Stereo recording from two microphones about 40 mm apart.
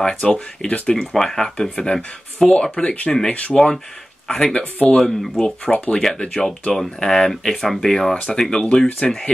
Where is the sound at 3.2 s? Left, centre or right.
Left.